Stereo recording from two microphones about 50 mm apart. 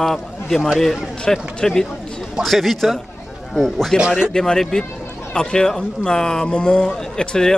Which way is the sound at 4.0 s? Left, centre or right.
Centre.